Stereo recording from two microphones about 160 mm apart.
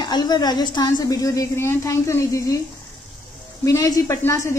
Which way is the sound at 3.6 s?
20° left (ahead or behind).